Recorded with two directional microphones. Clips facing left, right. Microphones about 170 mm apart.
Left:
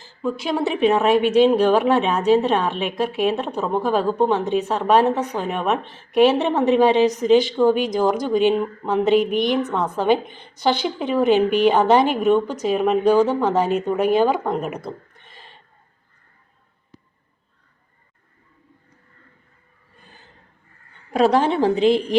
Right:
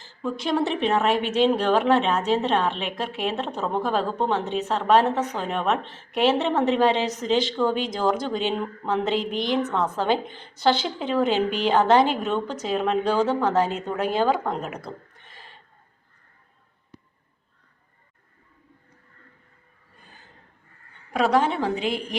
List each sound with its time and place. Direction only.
0.0 s a woman's voice: 5° left (ahead or behind)
21.1 s a woman's voice: 30° left (ahead or behind)